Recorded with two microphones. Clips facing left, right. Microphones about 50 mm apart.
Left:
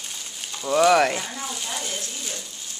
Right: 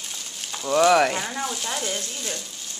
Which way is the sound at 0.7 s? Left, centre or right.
Centre.